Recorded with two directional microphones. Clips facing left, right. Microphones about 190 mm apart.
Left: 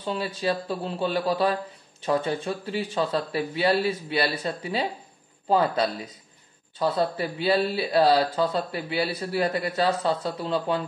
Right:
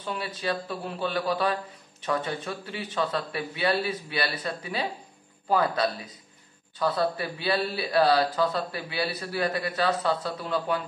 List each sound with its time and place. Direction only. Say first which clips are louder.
0.0 s speech: left 4 dB; 30° left (ahead or behind)